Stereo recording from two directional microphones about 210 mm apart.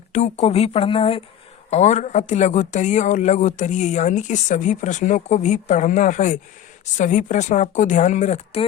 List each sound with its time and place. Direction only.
0.1 s speech: 35° left (ahead or behind)